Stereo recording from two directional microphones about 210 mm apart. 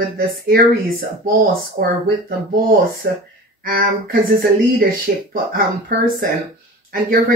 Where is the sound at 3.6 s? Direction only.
45° right (ahead or behind).